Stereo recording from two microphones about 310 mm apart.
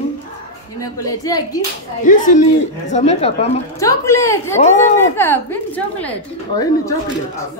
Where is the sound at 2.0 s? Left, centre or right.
Left.